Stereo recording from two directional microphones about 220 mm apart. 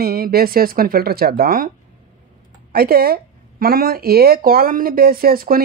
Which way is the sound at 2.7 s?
45° right (ahead or behind).